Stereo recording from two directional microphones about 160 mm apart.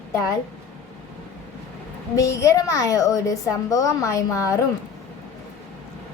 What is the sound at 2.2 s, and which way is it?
A woman's voice, 20° left (ahead or behind).